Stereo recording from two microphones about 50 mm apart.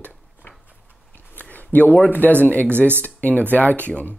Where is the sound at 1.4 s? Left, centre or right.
Left.